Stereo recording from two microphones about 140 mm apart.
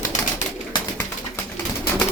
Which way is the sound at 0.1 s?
60° left (ahead or behind).